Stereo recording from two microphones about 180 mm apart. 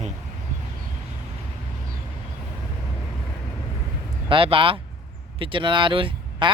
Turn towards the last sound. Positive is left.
turn(degrees=-30)  # may be behind; listen again after turning